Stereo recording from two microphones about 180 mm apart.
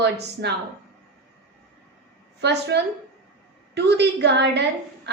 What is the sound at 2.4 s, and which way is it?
A woman's voice, 70° right (ahead or behind).